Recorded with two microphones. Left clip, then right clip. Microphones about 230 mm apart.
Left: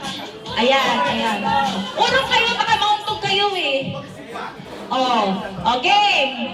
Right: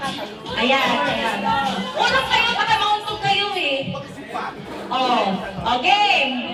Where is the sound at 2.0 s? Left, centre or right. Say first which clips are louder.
Left 1 dB; left.